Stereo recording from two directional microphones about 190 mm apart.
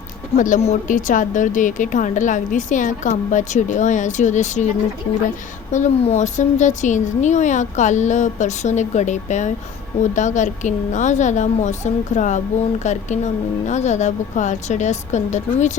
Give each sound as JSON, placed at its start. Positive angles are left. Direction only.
{"t": 0.3, "sound": "a woman's voice", "side_deg": 40}
{"t": 5.7, "sound": "a woman's voice", "side_deg": 35}